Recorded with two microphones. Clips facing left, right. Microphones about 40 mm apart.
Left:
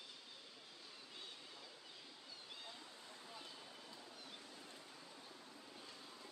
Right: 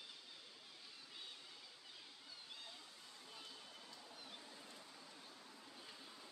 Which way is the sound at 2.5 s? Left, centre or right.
Centre.